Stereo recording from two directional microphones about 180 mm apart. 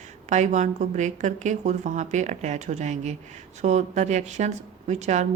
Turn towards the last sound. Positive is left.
turn(degrees=-40)  # may be behind; listen again after turning